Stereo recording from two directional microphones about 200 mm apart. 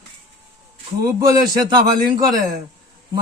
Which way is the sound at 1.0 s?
20° right (ahead or behind).